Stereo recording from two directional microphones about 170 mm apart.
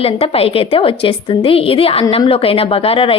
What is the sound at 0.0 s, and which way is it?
A woman's voice, 35° left (ahead or behind).